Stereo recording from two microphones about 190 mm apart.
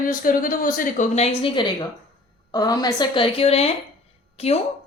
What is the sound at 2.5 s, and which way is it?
A woman's voice, 20° left (ahead or behind).